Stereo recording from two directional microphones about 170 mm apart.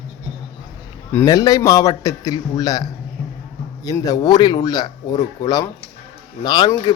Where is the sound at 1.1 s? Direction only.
20° left (ahead or behind).